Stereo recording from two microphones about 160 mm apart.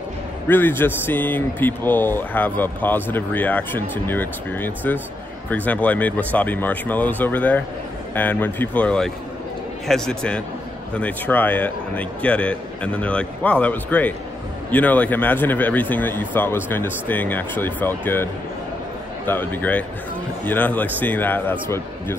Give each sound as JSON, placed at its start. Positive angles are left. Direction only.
{"t": 0.5, "sound": "a man's voice", "side_deg": 15}